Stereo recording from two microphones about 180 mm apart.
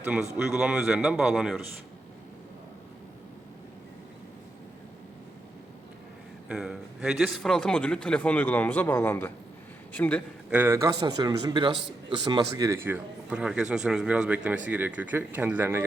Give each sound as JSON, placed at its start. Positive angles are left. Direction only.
{"t": 0.0, "sound": "a man's voice", "side_deg": -5}
{"t": 6.5, "sound": "a man's voice", "side_deg": -5}
{"t": 10.5, "sound": "a man's voice", "side_deg": -10}